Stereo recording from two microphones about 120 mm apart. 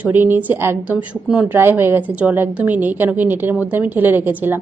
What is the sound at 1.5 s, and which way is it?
A woman's voice, 20° right (ahead or behind).